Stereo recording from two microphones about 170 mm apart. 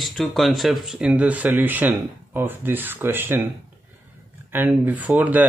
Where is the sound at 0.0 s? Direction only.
Centre (ahead or behind).